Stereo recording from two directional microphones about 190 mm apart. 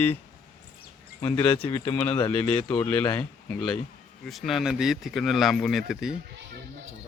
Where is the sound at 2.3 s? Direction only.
10° left (ahead or behind).